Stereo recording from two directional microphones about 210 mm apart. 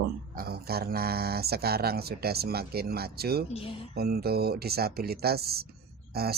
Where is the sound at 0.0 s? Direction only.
45° right (ahead or behind).